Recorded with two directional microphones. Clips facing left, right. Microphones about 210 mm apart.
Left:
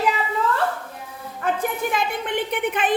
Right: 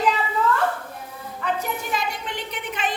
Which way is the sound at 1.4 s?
55° left (ahead or behind).